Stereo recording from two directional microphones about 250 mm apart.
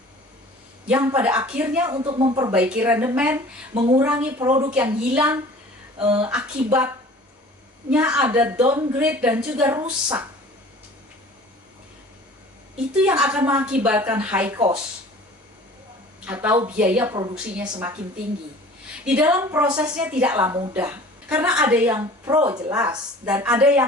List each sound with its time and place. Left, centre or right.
0.9 s speech: centre
2.0 s speech: right
2.5 s speech: centre
3.8 s speech: right
4.0 s a woman's voice: centre
6.0 s speech: right
6.2 s a woman's voice: centre
12.7 s a woman's voice: centre
16.2 s speech: centre
19.0 s a woman's voice: centre
21.8 s a woman's voice: centre